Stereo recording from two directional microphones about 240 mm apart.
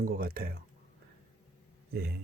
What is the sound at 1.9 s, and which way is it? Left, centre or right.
Speech, right.